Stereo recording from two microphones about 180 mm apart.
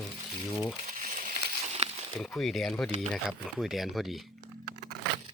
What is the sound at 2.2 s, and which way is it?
Speech, centre (ahead or behind).